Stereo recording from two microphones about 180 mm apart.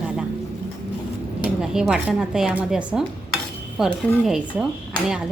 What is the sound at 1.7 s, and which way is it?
A woman's voice, 5° right (ahead or behind).